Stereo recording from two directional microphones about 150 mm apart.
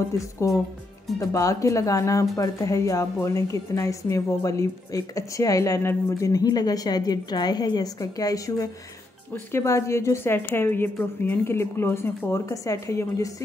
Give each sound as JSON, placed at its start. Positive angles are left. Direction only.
{"t": 1.2, "sound": "a woman's voice", "side_deg": 20}